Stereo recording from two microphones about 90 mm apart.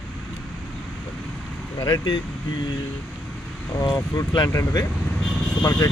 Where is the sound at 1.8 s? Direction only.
55° left (ahead or behind).